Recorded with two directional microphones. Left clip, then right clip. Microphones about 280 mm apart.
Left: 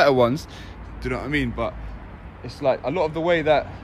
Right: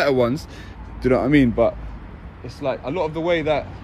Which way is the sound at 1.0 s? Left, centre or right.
Centre.